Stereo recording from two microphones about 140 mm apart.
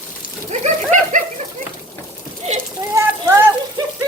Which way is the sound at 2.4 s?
50° right (ahead or behind).